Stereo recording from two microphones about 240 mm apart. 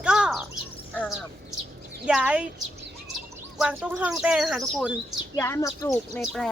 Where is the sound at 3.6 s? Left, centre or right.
Centre.